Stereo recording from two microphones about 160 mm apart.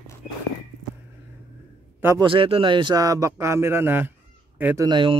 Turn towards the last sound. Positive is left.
turn(degrees=-30)  # may be behind; listen again after turning